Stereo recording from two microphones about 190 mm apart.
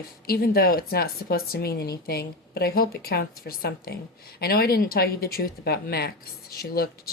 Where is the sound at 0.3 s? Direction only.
55° left (ahead or behind).